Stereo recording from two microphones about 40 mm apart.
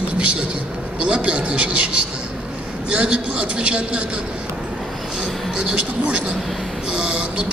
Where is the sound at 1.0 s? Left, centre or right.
Right.